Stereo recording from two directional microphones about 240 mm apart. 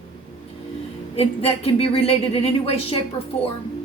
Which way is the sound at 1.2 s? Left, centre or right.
Left.